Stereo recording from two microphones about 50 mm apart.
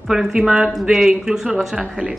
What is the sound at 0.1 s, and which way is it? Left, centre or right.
A woman's voice, centre.